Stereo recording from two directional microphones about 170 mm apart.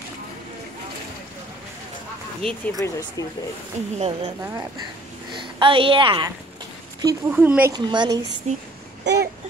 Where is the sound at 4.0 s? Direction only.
35° right (ahead or behind).